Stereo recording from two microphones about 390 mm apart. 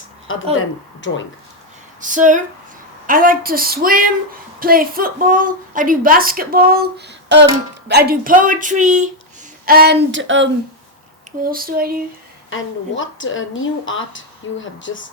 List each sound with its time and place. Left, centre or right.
0.5 s speech: left
2.0 s a woman's voice: centre
12.5 s speech: left